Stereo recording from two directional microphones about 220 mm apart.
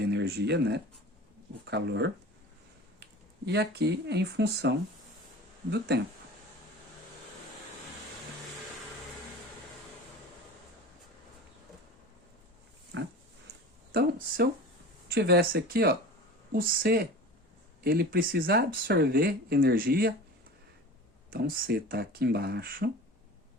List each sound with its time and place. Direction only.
0.0 s speech: 50° right (ahead or behind)
3.4 s speech: 50° right (ahead or behind)
5.7 s speech: 50° right (ahead or behind)
13.9 s speech: 45° right (ahead or behind)
21.2 s speech: 40° right (ahead or behind)